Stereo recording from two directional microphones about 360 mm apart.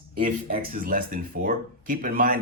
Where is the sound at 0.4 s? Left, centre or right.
Right.